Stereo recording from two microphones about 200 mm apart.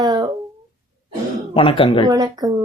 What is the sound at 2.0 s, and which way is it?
Speech, 20° right (ahead or behind).